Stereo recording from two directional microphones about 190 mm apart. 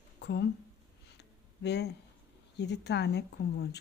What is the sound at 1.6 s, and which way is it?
Speech, 60° left (ahead or behind).